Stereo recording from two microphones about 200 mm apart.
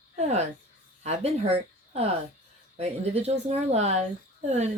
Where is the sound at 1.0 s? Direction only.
30° right (ahead or behind).